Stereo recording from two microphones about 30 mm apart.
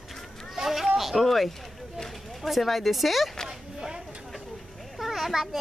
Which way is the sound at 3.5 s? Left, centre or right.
Centre.